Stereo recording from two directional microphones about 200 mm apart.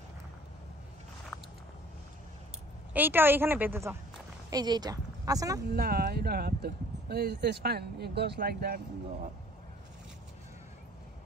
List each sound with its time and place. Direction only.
2.9 s a woman's voice: 10° right (ahead or behind)
5.7 s speech: 50° right (ahead or behind)